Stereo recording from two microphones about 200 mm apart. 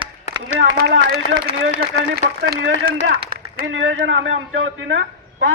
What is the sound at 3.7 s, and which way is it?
Speech, 70° right (ahead or behind).